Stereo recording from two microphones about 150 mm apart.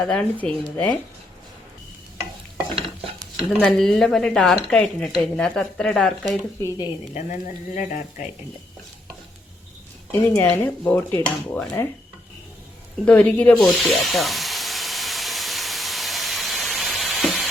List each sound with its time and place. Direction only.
0.0 s speech: 10° left (ahead or behind)
3.3 s speech: centre (ahead or behind)
6.6 s speech: 20° left (ahead or behind)
7.1 s speech: 60° left (ahead or behind)
10.1 s speech: 10° left (ahead or behind)
13.1 s hiss: 10° left (ahead or behind)